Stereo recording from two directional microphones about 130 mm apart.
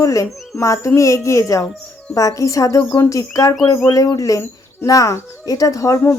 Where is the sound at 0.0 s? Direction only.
25° left (ahead or behind).